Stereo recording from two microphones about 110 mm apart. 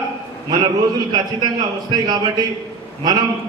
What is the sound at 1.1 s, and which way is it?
A man's voice, 40° right (ahead or behind).